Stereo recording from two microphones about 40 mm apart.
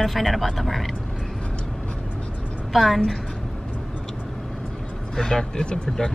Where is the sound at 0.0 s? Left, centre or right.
Centre.